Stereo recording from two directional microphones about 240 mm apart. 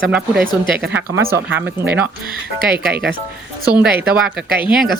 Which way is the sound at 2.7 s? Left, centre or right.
Centre.